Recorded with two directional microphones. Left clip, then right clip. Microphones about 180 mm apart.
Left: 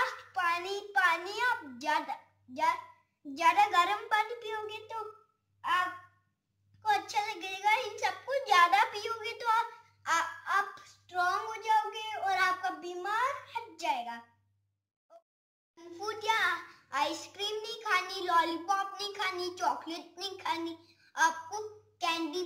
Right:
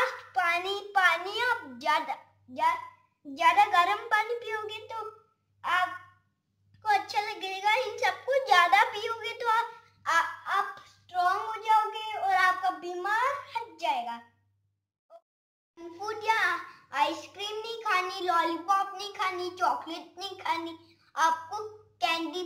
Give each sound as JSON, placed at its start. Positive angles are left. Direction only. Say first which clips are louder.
{"t": 0.3, "sound": "a sound", "louder": "right 4 dB", "side_deg": -25}
{"t": 3.3, "sound": "a woman's voice", "louder": "right 3 dB", "side_deg": -5}
{"t": 6.9, "sound": "a woman's voice", "louder": "right 3 dB", "side_deg": -10}
{"t": 12.8, "sound": "a woman's voice", "louder": "right 2 dB", "side_deg": -10}
{"t": 15.1, "sound": "a sound", "louder": "right 4 dB", "side_deg": 0}
{"t": 16.0, "sound": "a child's voice", "louder": "right 3 dB", "side_deg": 5}
{"t": 21.9, "sound": "child singing", "louder": "right 4 dB", "side_deg": -5}